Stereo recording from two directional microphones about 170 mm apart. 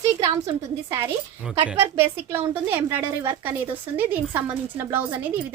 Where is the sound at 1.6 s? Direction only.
10° right (ahead or behind).